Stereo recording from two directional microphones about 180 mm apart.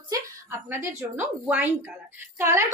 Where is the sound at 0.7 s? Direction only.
10° right (ahead or behind).